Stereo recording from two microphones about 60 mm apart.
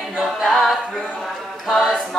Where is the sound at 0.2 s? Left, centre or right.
Centre.